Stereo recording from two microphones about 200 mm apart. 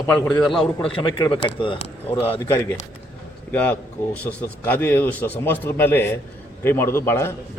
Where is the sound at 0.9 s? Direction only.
25° left (ahead or behind).